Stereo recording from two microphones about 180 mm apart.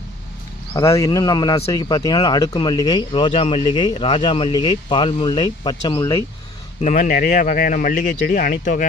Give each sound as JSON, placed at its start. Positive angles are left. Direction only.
{"t": 0.7, "sound": "speech", "side_deg": 15}
{"t": 6.8, "sound": "speech", "side_deg": 45}